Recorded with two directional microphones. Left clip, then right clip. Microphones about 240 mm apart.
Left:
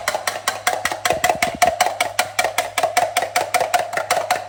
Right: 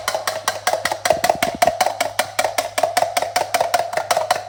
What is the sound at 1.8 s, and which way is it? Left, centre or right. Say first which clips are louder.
Music: even; centre.